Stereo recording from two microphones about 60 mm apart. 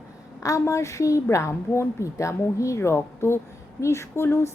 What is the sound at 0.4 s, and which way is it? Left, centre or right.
A woman's voice, left.